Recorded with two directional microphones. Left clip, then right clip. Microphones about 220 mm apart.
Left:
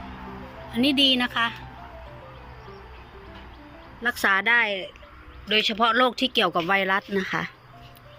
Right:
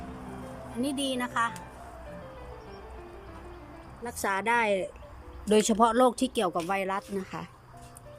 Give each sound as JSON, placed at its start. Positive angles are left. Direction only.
{"t": 0.8, "sound": "speech", "side_deg": -5}
{"t": 4.0, "sound": "speech", "side_deg": -5}
{"t": 5.5, "sound": "speech", "side_deg": -30}
{"t": 6.6, "sound": "speech", "side_deg": -5}